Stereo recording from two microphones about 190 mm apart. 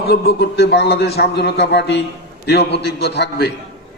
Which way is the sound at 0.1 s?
60° left (ahead or behind).